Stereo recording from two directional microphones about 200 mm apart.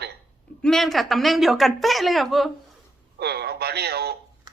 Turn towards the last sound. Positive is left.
turn(degrees=-50)  # may be behind; listen again after turning